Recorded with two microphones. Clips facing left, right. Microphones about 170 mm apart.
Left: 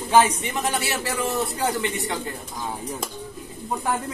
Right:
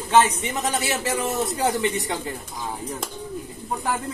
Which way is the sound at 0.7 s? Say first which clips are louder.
Right 2 dB; 20° right (ahead or behind).